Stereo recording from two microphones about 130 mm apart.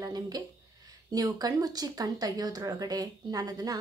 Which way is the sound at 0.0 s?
30° right (ahead or behind).